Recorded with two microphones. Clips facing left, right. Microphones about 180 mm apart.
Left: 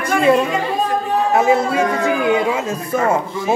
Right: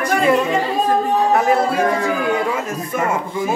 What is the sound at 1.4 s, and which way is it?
A man's voice, 20° left (ahead or behind).